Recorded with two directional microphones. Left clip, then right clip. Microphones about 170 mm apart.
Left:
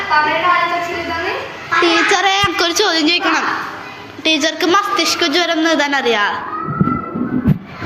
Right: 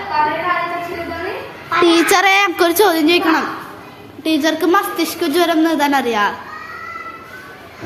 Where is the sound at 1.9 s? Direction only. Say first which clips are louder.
Right 2 dB; 85° right; by 3.4 s 40° right (ahead or behind).